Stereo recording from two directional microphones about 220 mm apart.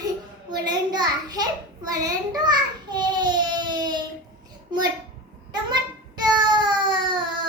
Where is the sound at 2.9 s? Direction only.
20° right (ahead or behind).